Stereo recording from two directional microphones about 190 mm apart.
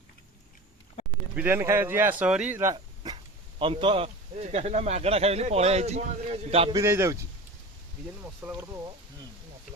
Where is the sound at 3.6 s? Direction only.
25° right (ahead or behind).